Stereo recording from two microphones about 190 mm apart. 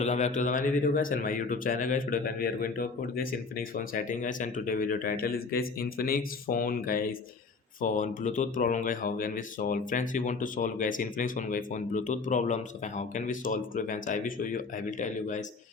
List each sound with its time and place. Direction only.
0.0 s speech: 40° left (ahead or behind)